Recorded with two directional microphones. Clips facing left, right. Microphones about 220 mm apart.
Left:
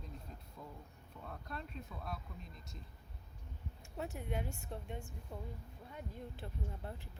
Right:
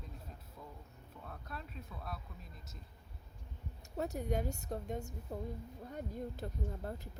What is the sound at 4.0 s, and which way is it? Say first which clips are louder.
Speech: right 5 dB; 40° right (ahead or behind).